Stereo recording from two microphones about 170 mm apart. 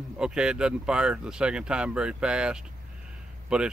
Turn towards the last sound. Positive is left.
turn(degrees=-5)  # may be behind; listen again after turning